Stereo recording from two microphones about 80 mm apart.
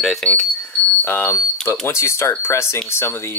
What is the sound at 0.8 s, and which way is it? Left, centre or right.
Smoke detector, left.